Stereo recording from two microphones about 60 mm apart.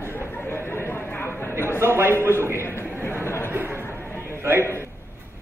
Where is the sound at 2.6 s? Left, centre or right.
Left.